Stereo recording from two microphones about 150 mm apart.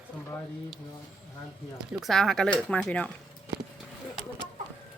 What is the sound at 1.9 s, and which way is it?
Speech, centre (ahead or behind).